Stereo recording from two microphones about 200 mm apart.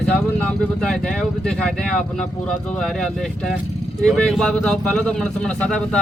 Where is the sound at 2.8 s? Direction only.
Centre (ahead or behind).